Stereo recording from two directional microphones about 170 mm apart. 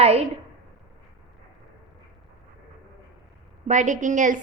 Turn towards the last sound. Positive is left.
turn(degrees=-50)  # may be behind; listen again after turning